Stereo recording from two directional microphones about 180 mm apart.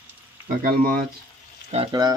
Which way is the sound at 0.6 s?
55° right (ahead or behind).